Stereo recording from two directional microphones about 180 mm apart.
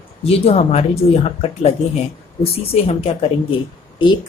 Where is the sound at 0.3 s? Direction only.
35° left (ahead or behind).